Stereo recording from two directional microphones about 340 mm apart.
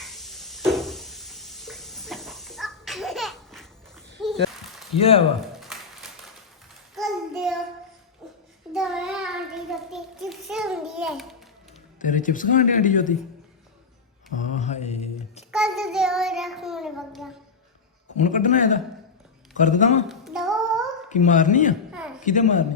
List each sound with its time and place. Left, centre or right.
0.0 s a sound: centre
4.9 s speech: centre
5.5 s a sound: centre
6.9 s child singing: centre
8.2 s a sound: centre
8.7 s child singing: centre
11.9 s speech: left
14.4 s mantra: left
15.5 s child singing: centre
18.3 s a man's voice: left
20.1 s child singing: centre
21.1 s speech: left
21.9 s a sound: centre
22.2 s speech: left